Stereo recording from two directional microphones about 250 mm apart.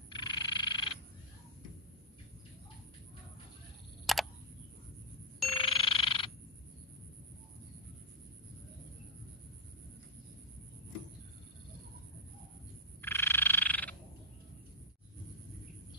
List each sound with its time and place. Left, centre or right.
0.1 s frog: centre
4.0 s camera: centre
5.5 s frog: centre
13.0 s frog: centre